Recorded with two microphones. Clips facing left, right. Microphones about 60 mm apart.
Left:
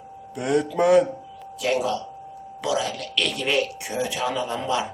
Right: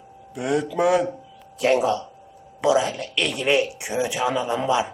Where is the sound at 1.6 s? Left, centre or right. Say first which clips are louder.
Right 4 dB; right.